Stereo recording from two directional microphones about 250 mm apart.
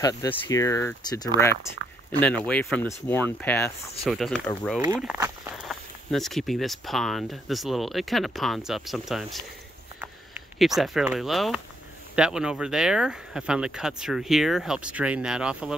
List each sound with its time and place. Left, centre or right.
0.0 s speech: centre
1.8 s a sound: right
2.1 s speech: centre
4.8 s speech: centre
10.6 s speech: centre